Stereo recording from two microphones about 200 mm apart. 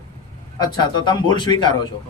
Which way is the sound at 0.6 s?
20° left (ahead or behind).